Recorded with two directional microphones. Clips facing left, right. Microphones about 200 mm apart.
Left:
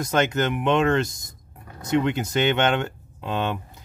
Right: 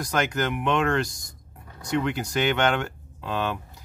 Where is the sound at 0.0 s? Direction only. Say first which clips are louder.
Left 4 dB; 25° left (ahead or behind).